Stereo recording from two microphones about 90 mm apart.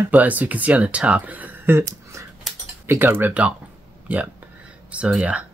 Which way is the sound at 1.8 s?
35° right (ahead or behind).